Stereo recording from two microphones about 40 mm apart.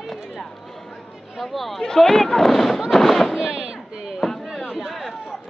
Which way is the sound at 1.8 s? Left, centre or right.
Centre.